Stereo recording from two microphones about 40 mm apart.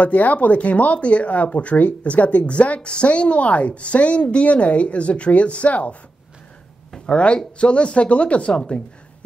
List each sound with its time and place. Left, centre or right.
0.0 s speech: left
7.1 s speech: left